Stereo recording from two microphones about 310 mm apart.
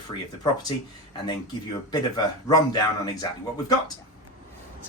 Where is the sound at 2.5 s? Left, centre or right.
Centre.